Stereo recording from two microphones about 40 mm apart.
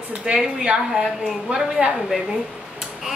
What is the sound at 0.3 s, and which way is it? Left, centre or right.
A woman's voice, right.